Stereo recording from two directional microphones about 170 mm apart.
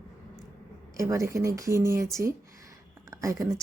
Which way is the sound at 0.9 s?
20° right (ahead or behind).